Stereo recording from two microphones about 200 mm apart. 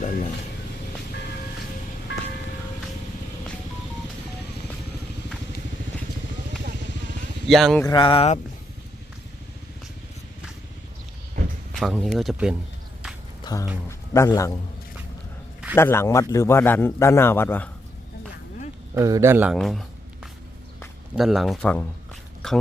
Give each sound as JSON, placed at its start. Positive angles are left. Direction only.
{"t": 0.0, "sound": "a sound", "side_deg": 40}
{"t": 7.4, "sound": "speech", "side_deg": 0}
{"t": 7.9, "sound": "speech", "side_deg": 25}
{"t": 11.7, "sound": "speech", "side_deg": 0}
{"t": 13.4, "sound": "a sound", "side_deg": 15}
{"t": 13.8, "sound": "a man's voice", "side_deg": 15}
{"t": 15.7, "sound": "a man's voice", "side_deg": 10}
{"t": 18.9, "sound": "speech", "side_deg": -15}
{"t": 19.5, "sound": "speech", "side_deg": 0}
{"t": 21.2, "sound": "speech", "side_deg": 0}